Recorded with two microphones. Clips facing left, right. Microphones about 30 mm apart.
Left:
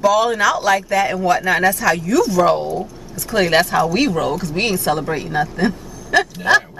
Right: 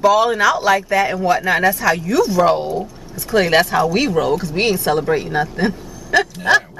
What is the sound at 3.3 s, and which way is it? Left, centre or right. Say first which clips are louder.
Speech: right 1 dB; centre.